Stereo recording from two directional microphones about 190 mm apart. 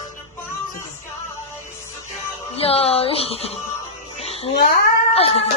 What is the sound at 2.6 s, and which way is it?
A woman's voice, 30° left (ahead or behind).